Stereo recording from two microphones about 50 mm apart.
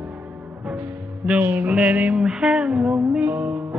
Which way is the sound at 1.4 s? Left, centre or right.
Right.